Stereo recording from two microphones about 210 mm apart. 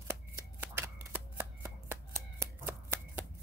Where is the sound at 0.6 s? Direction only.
10° right (ahead or behind).